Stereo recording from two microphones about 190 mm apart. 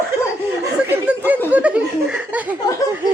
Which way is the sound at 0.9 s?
10° right (ahead or behind).